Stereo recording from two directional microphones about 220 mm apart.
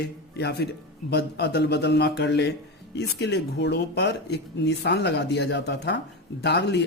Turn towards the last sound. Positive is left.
turn(degrees=50)  # may be behind; listen again after turning